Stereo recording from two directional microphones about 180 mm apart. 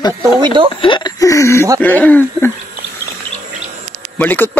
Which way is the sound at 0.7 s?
25° left (ahead or behind).